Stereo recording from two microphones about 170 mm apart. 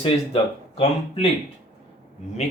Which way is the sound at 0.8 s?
35° left (ahead or behind).